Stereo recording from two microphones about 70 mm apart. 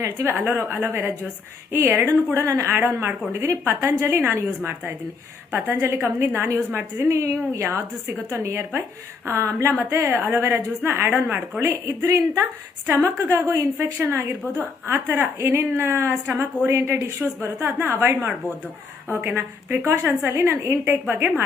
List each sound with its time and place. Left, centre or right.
0.3 s a woman's voice: right
8.0 s a woman's voice: right
9.9 s a woman's voice: right
11.6 s a woman's voice: right
16.2 s a woman's voice: right
16.6 s a woman's voice: right
17.2 s a woman's voice: right
19.1 s a woman's voice: right
19.8 s a woman's voice: right